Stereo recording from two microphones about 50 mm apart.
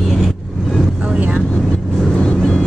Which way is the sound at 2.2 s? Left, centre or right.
Centre.